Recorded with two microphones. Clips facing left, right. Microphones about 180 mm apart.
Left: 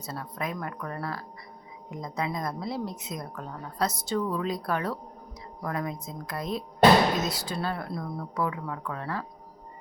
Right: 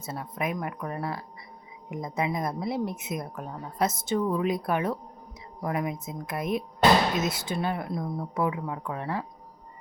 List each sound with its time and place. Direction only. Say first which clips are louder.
0.0 s speech: right 2 dB; 25° right (ahead or behind)